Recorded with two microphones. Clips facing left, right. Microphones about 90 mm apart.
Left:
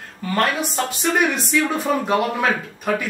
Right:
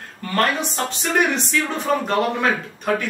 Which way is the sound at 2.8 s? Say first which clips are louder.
Right 1 dB; 5° left (ahead or behind).